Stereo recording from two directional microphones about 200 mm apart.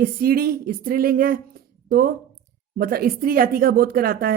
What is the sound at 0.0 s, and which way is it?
Speech, 50° right (ahead or behind).